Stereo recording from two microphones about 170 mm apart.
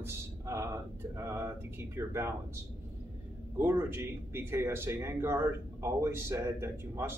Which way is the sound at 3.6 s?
15° right (ahead or behind).